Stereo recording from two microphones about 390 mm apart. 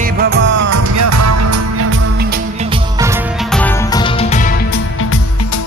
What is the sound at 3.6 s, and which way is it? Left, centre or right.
Music, centre.